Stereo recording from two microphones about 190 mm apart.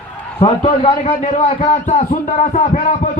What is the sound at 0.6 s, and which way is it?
A man's voice, 30° left (ahead or behind).